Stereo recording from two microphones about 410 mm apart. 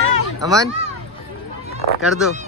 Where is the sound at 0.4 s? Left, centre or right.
Centre.